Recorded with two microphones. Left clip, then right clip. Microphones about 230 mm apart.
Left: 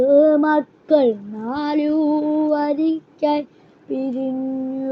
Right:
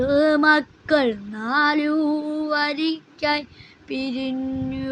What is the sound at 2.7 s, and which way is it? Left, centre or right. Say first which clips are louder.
Music: left 4 dB; centre.